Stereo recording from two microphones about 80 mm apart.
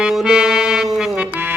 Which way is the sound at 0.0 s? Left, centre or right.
Centre.